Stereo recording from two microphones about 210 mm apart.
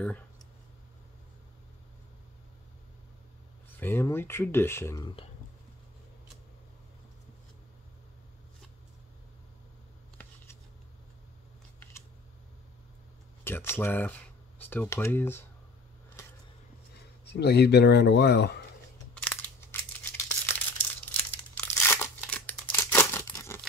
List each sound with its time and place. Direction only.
3.8 s speech: 10° left (ahead or behind)
13.4 s speech: 10° left (ahead or behind)
17.2 s speech: 55° left (ahead or behind)
19.2 s a sound: 10° left (ahead or behind)
21.1 s tearing: 10° left (ahead or behind)